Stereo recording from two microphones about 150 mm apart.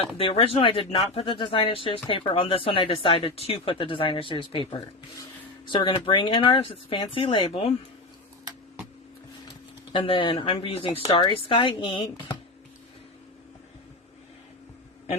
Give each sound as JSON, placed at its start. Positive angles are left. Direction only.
{"t": 0.2, "sound": "speech", "side_deg": 40}
{"t": 9.9, "sound": "speech", "side_deg": 35}